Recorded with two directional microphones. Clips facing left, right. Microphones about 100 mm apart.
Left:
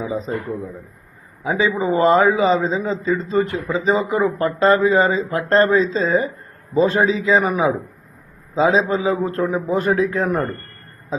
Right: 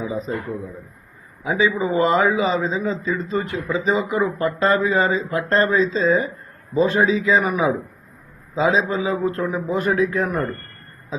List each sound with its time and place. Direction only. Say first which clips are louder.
0.0 s a man's voice: left 1 dB; 30° left (ahead or behind)
1.5 s speech: left 1 dB; 35° left (ahead or behind)